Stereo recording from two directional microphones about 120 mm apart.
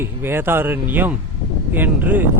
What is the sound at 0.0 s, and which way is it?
Speech, 20° right (ahead or behind).